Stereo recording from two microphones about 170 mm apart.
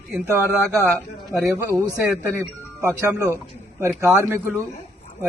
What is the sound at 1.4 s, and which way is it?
A man's voice, 15° right (ahead or behind).